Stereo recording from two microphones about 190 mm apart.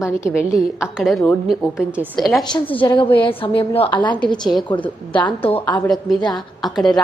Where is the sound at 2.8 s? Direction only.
25° left (ahead or behind).